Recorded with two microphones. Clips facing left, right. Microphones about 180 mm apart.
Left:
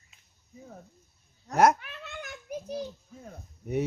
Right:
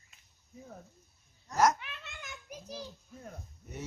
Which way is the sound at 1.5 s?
60° left (ahead or behind).